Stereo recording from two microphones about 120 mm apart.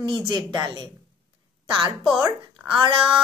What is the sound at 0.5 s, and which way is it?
Speech, 35° right (ahead or behind).